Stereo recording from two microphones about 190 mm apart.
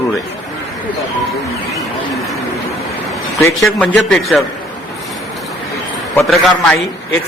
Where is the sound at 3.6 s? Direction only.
5° left (ahead or behind).